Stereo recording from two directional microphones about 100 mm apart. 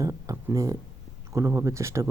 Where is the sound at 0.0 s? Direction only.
35° right (ahead or behind).